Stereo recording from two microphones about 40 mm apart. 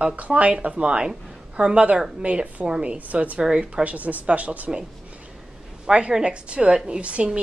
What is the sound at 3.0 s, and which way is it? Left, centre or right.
Speech, right.